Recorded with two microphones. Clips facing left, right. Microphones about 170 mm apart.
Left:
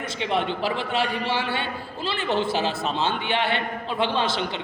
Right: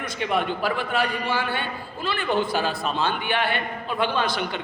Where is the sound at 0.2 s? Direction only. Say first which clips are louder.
Even; 25° left (ahead or behind).